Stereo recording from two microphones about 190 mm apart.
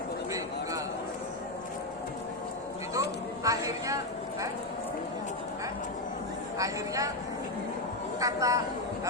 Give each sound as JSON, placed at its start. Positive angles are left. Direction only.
{"t": 2.9, "sound": "a sound", "side_deg": -15}
{"t": 6.6, "sound": "speech", "side_deg": -15}
{"t": 8.2, "sound": "speech", "side_deg": -15}